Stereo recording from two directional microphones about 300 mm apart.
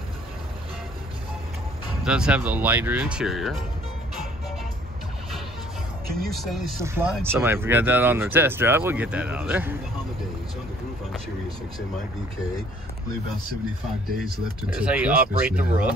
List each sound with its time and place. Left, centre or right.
2.0 s speech: centre
6.3 s speech: centre
14.8 s speech: centre